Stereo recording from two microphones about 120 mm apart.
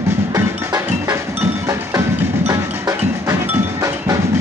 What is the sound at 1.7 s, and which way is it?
Wood block, 25° right (ahead or behind).